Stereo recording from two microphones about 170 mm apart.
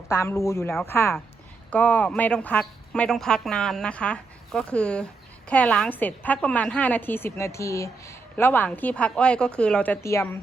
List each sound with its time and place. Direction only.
0.1 s a woman's voice: 15° left (ahead or behind)